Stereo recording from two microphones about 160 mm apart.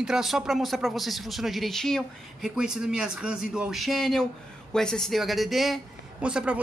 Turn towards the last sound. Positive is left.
turn(degrees=-5)  # may be behind; listen again after turning